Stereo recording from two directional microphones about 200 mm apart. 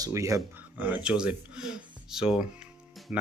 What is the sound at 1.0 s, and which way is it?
Speech, 5° right (ahead or behind).